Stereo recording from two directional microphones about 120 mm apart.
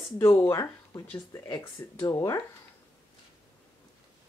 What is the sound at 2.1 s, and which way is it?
Speech, 25° left (ahead or behind).